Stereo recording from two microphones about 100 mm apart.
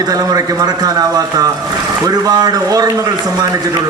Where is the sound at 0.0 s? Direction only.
40° right (ahead or behind).